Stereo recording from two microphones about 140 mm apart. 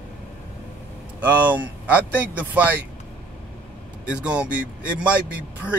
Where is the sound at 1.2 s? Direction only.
10° right (ahead or behind).